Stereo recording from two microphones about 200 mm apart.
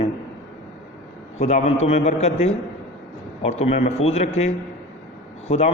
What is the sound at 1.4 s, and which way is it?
A man's voice, 35° left (ahead or behind).